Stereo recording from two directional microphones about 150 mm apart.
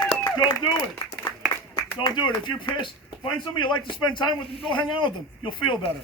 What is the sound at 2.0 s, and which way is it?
A man's voice, 30° left (ahead or behind).